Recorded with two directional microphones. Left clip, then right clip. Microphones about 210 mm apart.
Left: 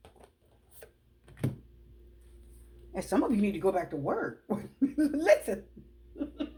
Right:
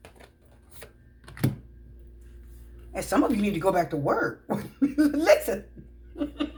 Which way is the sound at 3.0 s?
35° left (ahead or behind).